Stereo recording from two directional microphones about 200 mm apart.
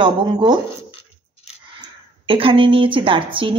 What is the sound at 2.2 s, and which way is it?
A woman's voice, 25° right (ahead or behind).